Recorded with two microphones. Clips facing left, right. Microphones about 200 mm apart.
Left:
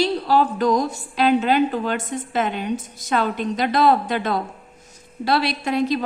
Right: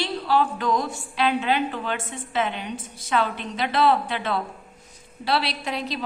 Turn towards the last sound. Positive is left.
turn(degrees=50)  # may be behind; listen again after turning